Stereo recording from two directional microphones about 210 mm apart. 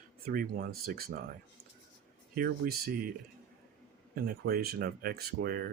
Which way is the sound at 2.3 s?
45° right (ahead or behind).